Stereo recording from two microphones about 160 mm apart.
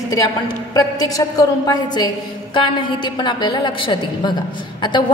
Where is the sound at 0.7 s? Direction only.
25° left (ahead or behind).